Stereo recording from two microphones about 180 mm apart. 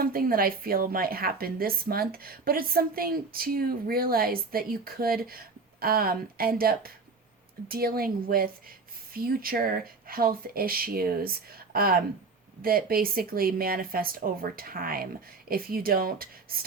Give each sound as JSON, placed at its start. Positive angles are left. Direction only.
{"t": 0.0, "sound": "a woman's voice", "side_deg": -55}